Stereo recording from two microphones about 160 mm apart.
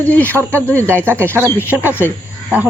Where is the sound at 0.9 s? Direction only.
15° right (ahead or behind).